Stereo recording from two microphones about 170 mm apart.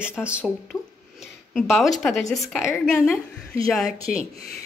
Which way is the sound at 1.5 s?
Centre (ahead or behind).